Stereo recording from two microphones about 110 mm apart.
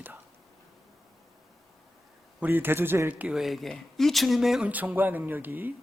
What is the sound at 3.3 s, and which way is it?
Speech, centre (ahead or behind).